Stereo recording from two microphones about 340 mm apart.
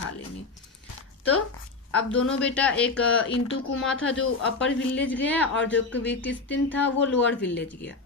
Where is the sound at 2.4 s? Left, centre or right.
Centre.